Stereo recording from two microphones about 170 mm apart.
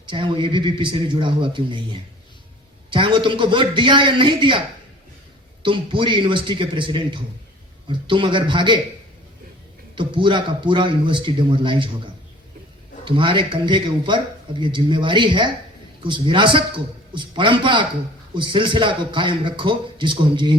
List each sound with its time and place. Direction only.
0.0 s a man's voice: 30° right (ahead or behind)
5.6 s a man's voice: 30° right (ahead or behind)
9.9 s a man's voice: 30° right (ahead or behind)
13.1 s a man's voice: 30° right (ahead or behind)